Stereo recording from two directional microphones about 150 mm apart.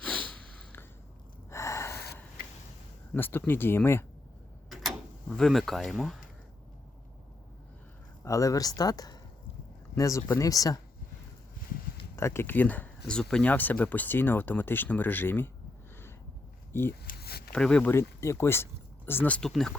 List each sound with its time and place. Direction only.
0.0 s sniff: 10° left (ahead or behind)
1.5 s gasp: 20° left (ahead or behind)
3.1 s speech: 15° left (ahead or behind)
4.7 s tick-tock: centre (ahead or behind)
5.4 s speech: centre (ahead or behind)
8.2 s speech: 20° left (ahead or behind)
12.1 s speech: 15° left (ahead or behind)
16.7 s speech: 15° left (ahead or behind)
17.1 s a sound: 90° left
17.5 s speech: 5° left (ahead or behind)
17.9 s speech: 20° left (ahead or behind); by 19.7 s 5° left (ahead or behind)